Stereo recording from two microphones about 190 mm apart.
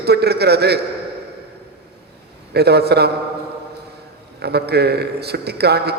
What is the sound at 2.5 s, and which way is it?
Speech, 60° right (ahead or behind).